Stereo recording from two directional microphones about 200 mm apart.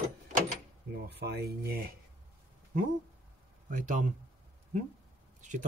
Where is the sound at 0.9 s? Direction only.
55° right (ahead or behind).